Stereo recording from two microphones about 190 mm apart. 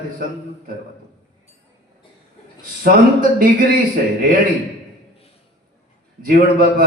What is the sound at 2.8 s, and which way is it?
Speech, 50° right (ahead or behind).